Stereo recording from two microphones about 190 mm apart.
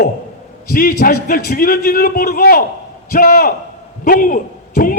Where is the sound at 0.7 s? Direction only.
50° left (ahead or behind).